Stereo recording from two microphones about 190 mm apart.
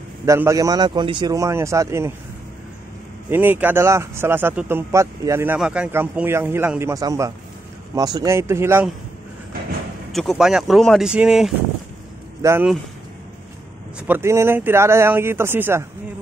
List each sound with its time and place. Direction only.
0.2 s a man's voice: 15° right (ahead or behind)
3.3 s a man's voice: 10° right (ahead or behind)
10.1 s speech: centre (ahead or behind)
12.4 s speech: 15° right (ahead or behind)
13.9 s a man's voice: 10° right (ahead or behind)